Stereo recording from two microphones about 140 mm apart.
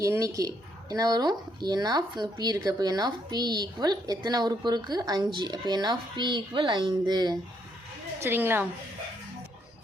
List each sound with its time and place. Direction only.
0.0 s speech: 25° right (ahead or behind)
8.2 s a woman's voice: 15° right (ahead or behind)